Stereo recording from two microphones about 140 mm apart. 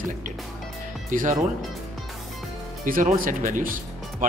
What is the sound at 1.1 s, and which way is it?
Speech, 70° right (ahead or behind).